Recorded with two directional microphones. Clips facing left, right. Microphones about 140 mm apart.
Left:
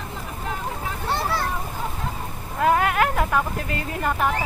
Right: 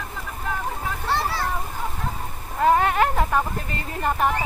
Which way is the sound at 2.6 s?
Centre (ahead or behind).